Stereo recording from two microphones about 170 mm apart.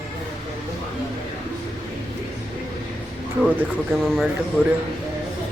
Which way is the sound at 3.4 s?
5° right (ahead or behind).